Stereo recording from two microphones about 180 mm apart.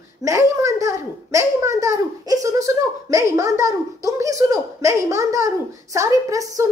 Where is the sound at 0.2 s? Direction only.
15° right (ahead or behind).